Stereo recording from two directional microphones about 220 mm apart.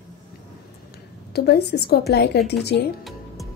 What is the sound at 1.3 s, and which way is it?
A woman's voice, 45° left (ahead or behind).